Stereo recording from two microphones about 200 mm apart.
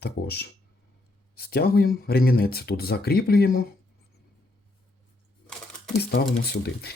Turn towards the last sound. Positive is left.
turn(degrees=55)  # may be behind; listen again after turning